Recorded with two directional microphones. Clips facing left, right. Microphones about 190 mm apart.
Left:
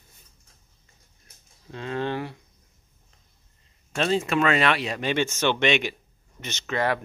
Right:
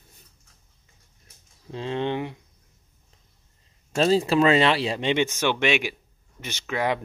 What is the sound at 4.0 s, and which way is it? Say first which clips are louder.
Speech: right 4 dB; 35° right (ahead or behind).